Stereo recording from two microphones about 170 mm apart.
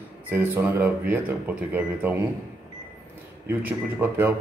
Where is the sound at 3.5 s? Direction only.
10° right (ahead or behind).